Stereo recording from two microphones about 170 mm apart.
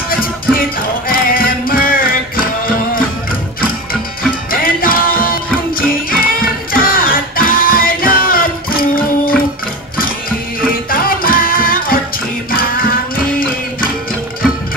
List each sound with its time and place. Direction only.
0.1 s music: 60° left (ahead or behind)
4.5 s music: 55° left (ahead or behind)